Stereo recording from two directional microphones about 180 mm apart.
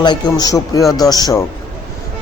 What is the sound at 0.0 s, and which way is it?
Speech, 25° left (ahead or behind).